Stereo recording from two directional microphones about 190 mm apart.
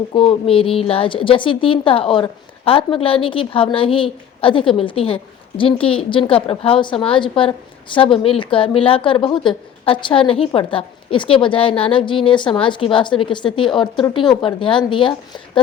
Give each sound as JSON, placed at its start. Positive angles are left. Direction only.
{"t": 0.1, "sound": "a woman's voice", "side_deg": 25}